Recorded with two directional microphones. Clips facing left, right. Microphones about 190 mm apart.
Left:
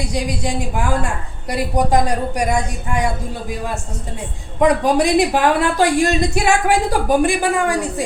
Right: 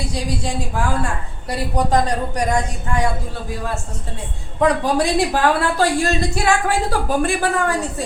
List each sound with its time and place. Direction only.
0.0 s speech: 15° left (ahead or behind)